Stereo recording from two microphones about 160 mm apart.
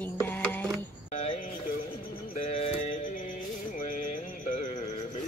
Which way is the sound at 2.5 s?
40° left (ahead or behind).